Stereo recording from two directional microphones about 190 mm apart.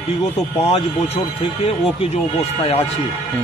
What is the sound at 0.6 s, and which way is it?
Speech, 30° left (ahead or behind).